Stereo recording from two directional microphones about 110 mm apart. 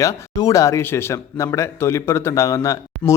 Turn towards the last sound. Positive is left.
turn(degrees=30)  # may be behind; listen again after turning